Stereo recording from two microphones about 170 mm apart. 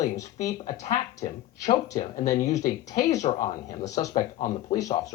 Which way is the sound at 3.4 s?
20° left (ahead or behind).